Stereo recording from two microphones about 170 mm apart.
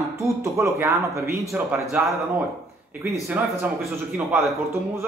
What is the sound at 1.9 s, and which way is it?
Speech, centre (ahead or behind).